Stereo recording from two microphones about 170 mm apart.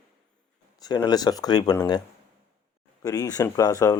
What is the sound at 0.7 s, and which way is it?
Speech, 25° left (ahead or behind).